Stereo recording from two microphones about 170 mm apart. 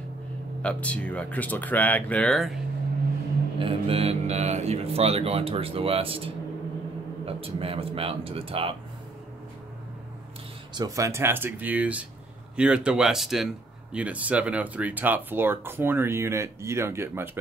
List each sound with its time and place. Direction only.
0.6 s speech: 5° left (ahead or behind)
3.5 s speech: 35° right (ahead or behind)
10.7 s speech: 20° right (ahead or behind)